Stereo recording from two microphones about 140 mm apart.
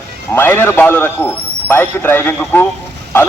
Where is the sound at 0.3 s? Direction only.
15° left (ahead or behind).